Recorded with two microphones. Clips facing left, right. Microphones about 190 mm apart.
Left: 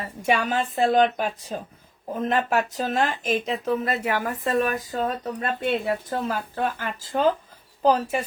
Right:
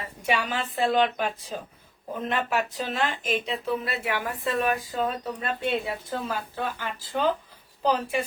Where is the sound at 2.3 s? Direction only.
45° left (ahead or behind).